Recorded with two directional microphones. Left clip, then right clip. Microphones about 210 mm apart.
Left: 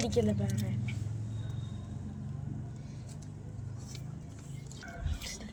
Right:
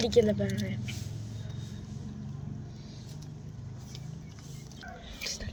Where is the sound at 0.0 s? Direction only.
30° right (ahead or behind).